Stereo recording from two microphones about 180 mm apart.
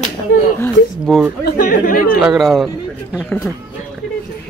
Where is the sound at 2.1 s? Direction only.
Centre (ahead or behind).